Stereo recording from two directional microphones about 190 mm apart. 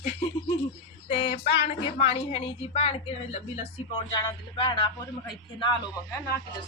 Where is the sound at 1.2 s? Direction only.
30° left (ahead or behind).